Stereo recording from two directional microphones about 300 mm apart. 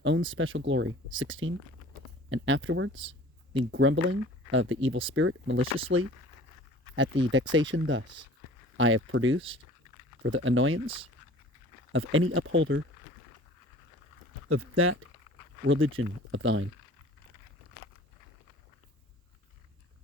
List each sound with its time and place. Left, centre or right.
0.0 s speech: right
11.9 s speech: right
14.5 s speech: right